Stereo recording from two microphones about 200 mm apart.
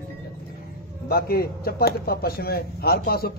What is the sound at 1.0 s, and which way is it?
A man's voice, 50° left (ahead or behind).